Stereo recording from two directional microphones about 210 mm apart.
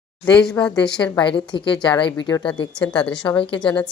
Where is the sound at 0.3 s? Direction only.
5° left (ahead or behind).